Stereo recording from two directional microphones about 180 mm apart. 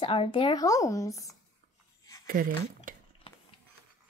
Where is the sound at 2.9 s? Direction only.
50° right (ahead or behind).